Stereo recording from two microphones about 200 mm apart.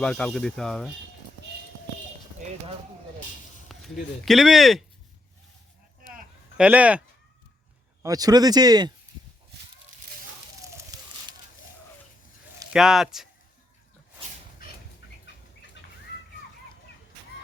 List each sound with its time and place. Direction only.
0.0 s speech: 5° left (ahead or behind)
3.7 s speech: centre (ahead or behind)
6.6 s speech: 5° right (ahead or behind)
8.0 s speech: 20° right (ahead or behind)
10.9 s fire: 20° right (ahead or behind)
12.7 s speech: centre (ahead or behind)